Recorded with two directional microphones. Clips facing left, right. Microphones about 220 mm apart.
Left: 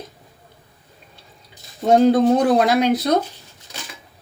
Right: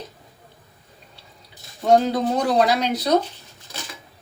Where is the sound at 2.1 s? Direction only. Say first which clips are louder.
Left 5 dB; 55° left (ahead or behind).